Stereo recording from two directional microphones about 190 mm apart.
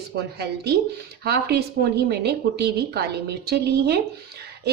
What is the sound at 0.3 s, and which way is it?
A woman's voice, 60° right (ahead or behind).